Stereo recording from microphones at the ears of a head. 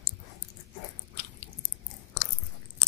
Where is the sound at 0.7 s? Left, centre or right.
Left.